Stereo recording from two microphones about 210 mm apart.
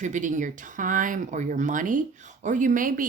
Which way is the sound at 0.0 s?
35° right (ahead or behind).